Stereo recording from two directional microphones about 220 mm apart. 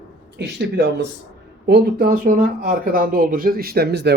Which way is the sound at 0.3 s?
50° right (ahead or behind).